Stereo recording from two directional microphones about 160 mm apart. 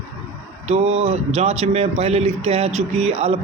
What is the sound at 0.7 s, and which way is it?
A man's voice, 40° right (ahead or behind).